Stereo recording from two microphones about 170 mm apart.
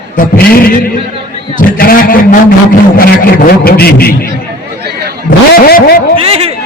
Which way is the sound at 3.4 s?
65° left (ahead or behind).